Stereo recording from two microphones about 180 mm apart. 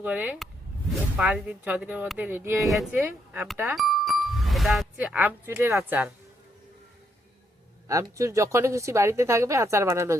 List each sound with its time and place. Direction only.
0.0 s speech: 10° right (ahead or behind)
7.9 s speech: 15° right (ahead or behind)